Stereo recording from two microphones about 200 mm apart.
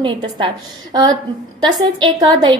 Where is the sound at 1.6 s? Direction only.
20° right (ahead or behind).